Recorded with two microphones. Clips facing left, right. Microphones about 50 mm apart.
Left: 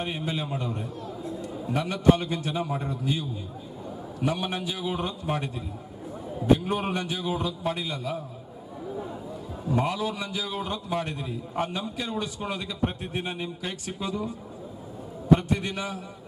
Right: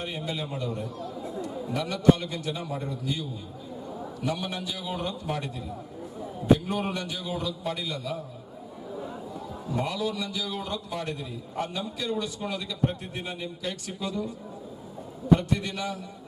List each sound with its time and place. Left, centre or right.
0.0 s a man's voice: left
1.7 s a man's voice: left
4.2 s a man's voice: left
6.7 s a man's voice: left
9.8 s a man's voice: left
15.4 s a man's voice: left